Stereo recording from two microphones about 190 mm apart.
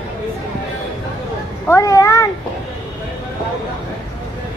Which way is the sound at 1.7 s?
15° left (ahead or behind).